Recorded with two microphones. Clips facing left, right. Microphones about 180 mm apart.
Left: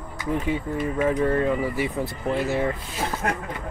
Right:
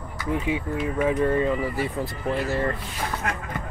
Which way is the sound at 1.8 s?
20° left (ahead or behind).